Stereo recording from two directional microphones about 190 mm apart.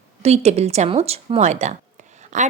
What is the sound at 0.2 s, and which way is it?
Speech, 35° right (ahead or behind).